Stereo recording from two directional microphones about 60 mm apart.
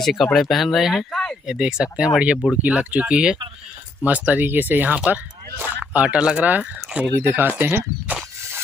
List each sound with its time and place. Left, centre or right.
0.0 s speech: centre
1.1 s a sound: centre
1.4 s speech: centre
4.0 s speech: right
6.4 s speech: right
7.3 s speech: right